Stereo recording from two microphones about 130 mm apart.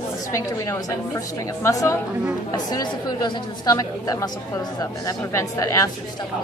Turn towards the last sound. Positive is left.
turn(degrees=25)  # may be behind; listen again after turning